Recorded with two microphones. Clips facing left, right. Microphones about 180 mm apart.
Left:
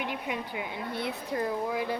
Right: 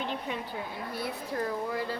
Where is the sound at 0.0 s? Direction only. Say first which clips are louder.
Left 1 dB; 10° left (ahead or behind).